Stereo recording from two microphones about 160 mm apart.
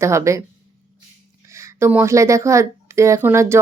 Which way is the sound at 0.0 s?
20° right (ahead or behind).